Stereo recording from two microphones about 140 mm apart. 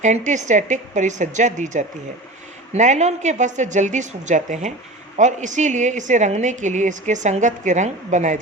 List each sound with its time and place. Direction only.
0.0 s a woman's voice: 60° right (ahead or behind)